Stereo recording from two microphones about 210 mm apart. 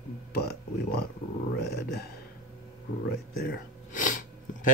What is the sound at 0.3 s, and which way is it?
Speech, 50° left (ahead or behind).